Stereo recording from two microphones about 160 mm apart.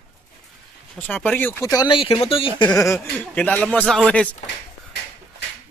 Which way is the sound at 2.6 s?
20° left (ahead or behind).